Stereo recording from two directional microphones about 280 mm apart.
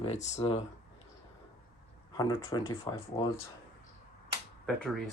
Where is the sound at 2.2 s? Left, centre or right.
Centre.